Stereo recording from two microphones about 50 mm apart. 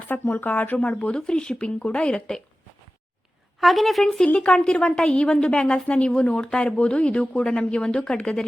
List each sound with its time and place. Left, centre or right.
0.1 s speech: left; by 2.4 s centre
3.6 s a woman's voice: centre
4.4 s a woman's voice: centre